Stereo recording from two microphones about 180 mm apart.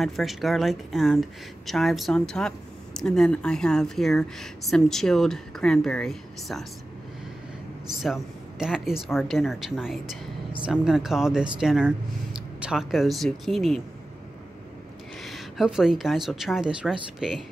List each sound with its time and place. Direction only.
0.0 s speech: centre (ahead or behind)
8.0 s speech: 5° right (ahead or behind)
15.2 s speech: centre (ahead or behind)